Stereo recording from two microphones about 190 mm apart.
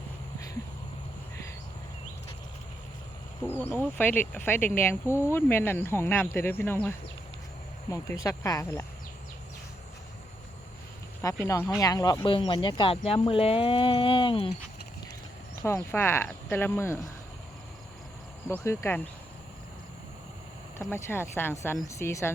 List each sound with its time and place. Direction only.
3.4 s speech: 10° left (ahead or behind)
11.2 s speech: 15° left (ahead or behind)
15.6 s speech: 15° left (ahead or behind)
18.6 s speech: 15° left (ahead or behind)
20.9 s speech: 10° left (ahead or behind)